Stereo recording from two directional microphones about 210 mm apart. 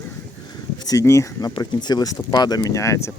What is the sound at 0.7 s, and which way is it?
Speech, 15° left (ahead or behind).